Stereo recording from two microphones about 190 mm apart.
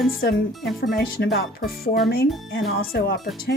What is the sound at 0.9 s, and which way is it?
A woman's voice, 55° left (ahead or behind).